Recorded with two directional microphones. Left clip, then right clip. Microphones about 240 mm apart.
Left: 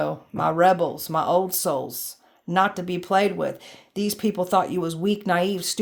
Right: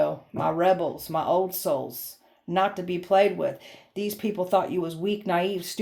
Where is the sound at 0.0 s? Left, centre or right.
Left.